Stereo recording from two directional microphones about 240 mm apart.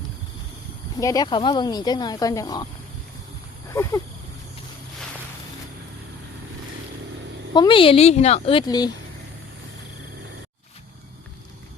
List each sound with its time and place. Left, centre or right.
0.9 s speech: centre
3.7 s a sound: centre
7.5 s a woman's voice: centre